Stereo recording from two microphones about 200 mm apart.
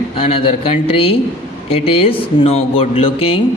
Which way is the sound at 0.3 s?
30° left (ahead or behind).